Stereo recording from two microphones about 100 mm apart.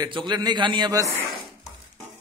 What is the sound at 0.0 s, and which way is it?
A man's voice, 50° right (ahead or behind).